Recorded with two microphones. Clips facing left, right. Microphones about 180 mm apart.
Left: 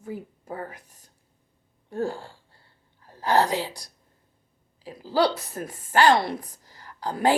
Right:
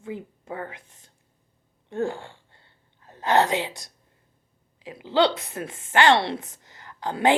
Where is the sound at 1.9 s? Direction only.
25° right (ahead or behind).